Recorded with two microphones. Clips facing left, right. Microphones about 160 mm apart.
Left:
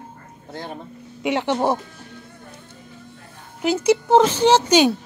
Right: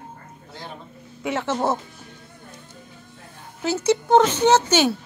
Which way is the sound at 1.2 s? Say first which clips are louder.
Left 3 dB; 15° left (ahead or behind).